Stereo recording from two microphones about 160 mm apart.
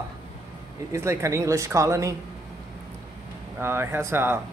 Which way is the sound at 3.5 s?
15° right (ahead or behind).